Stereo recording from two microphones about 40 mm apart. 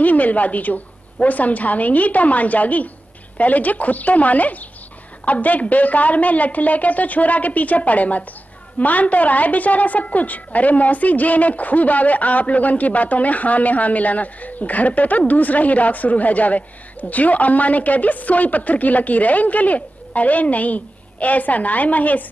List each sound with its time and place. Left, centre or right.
0.0 s a woman's voice: left